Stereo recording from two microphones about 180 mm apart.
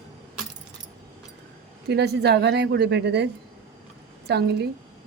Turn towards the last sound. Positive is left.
turn(degrees=-65)  # may be behind; listen again after turning